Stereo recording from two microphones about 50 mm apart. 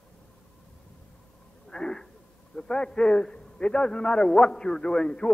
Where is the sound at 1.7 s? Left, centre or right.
Centre.